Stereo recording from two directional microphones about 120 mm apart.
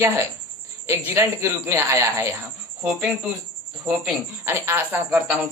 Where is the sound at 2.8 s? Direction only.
10° right (ahead or behind).